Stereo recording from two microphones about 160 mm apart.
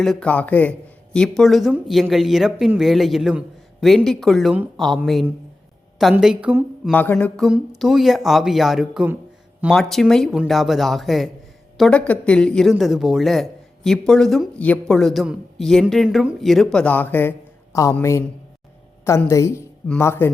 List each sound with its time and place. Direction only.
0.0 s speech: 5° left (ahead or behind)
6.0 s speech: centre (ahead or behind)
6.9 s a man's voice: 10° left (ahead or behind)